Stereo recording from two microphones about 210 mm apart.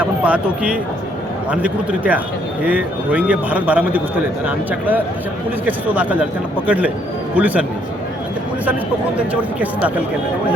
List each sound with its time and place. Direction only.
0.0 s speech: 5° right (ahead or behind)
9.1 s speech: 5° right (ahead or behind)